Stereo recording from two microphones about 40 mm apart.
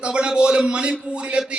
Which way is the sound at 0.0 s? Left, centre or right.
Right.